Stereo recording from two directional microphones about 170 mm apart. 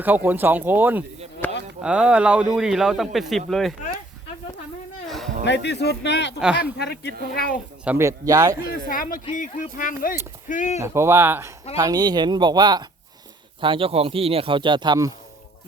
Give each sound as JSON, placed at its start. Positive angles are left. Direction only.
{"t": 0.3, "sound": "speech", "side_deg": -10}
{"t": 1.4, "sound": "chop", "side_deg": 10}
{"t": 1.8, "sound": "speech", "side_deg": -5}
{"t": 5.0, "sound": "a sound", "side_deg": 0}
{"t": 5.5, "sound": "speech", "side_deg": 85}
{"t": 6.7, "sound": "speech", "side_deg": 70}
{"t": 7.9, "sound": "speech", "side_deg": -15}
{"t": 8.9, "sound": "speech", "side_deg": 55}
{"t": 10.8, "sound": "speech", "side_deg": -15}